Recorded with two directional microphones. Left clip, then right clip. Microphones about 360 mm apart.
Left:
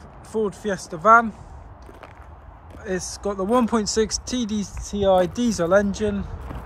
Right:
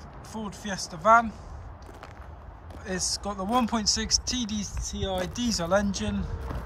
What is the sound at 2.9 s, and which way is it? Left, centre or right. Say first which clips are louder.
A man's voice: left 4 dB; centre.